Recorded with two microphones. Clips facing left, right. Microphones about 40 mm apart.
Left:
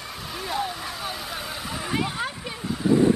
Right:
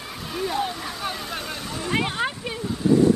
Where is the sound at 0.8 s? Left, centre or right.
Centre.